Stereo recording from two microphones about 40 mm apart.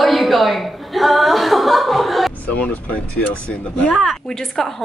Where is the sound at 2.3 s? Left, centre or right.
Left.